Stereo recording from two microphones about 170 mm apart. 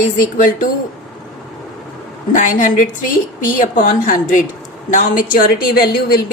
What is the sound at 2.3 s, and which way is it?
A woman's voice, 50° left (ahead or behind).